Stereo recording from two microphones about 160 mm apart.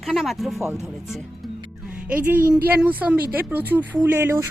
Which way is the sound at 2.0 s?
10° right (ahead or behind).